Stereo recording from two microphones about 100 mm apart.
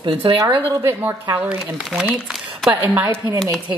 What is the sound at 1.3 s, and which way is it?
Speech, 15° right (ahead or behind).